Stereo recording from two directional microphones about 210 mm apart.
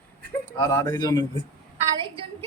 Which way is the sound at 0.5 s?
15° left (ahead or behind).